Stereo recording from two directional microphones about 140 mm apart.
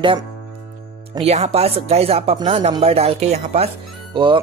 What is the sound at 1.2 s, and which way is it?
Speech, 50° right (ahead or behind).